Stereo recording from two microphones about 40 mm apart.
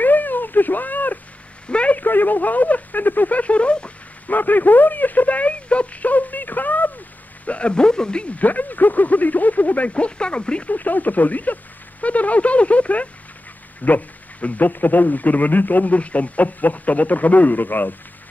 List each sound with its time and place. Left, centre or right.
0.0 s a sound: left
1.7 s a sound: left
2.0 s speech: left
3.3 s speech: left
4.3 s speech: left
7.4 s speech: left
8.4 s speech: left
10.7 s speech: left